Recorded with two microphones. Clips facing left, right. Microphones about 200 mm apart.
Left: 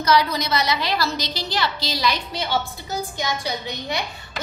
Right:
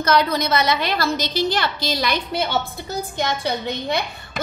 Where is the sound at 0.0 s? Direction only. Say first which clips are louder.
Right 1 dB; 55° right (ahead or behind).